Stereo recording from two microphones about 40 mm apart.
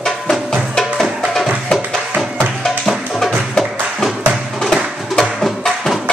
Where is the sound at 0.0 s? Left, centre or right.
Centre.